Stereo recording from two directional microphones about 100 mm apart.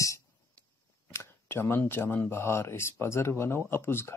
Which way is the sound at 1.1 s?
25° left (ahead or behind).